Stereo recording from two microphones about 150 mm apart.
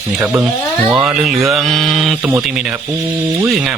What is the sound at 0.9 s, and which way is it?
Speech, centre (ahead or behind).